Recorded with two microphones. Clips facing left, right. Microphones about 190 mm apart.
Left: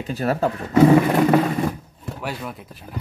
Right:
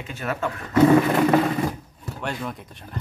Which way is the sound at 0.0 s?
35° left (ahead or behind).